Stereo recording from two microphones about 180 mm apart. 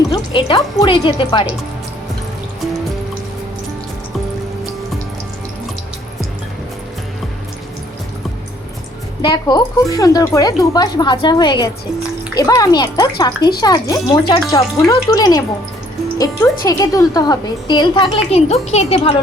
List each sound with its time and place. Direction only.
0.1 s speech: 25° left (ahead or behind)
9.2 s speech: 25° left (ahead or behind)